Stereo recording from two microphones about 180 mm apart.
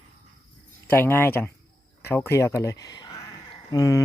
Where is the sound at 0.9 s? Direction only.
10° left (ahead or behind).